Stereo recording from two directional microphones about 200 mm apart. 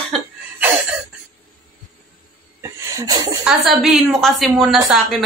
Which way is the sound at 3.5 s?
Centre (ahead or behind).